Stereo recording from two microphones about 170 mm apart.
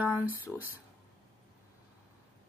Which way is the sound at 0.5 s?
5° left (ahead or behind).